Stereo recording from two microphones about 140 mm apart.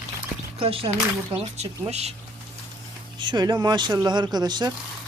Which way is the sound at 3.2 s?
35° right (ahead or behind).